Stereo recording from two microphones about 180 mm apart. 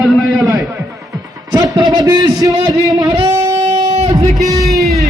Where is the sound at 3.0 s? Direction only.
20° right (ahead or behind).